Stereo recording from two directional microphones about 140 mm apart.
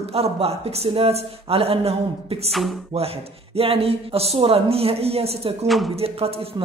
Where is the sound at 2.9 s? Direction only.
45° right (ahead or behind).